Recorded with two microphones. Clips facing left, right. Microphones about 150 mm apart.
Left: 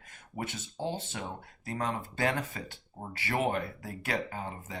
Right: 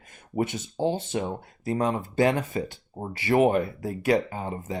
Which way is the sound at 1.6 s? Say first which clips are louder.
Right 8 dB; 20° right (ahead or behind).